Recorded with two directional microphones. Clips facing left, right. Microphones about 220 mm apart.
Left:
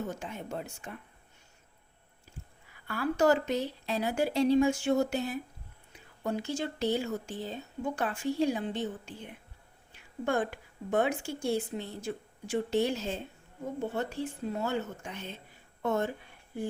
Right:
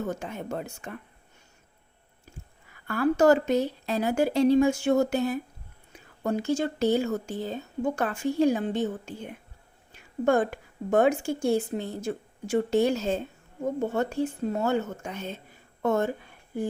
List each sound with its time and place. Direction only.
0.2 s speech: 45° right (ahead or behind)
2.8 s speech: 50° right (ahead or behind)
9.9 s a woman's voice: 45° right (ahead or behind)